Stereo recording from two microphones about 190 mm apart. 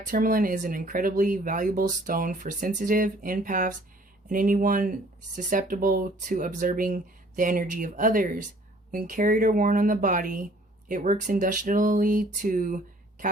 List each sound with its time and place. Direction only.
0.1 s speech: 45° right (ahead or behind)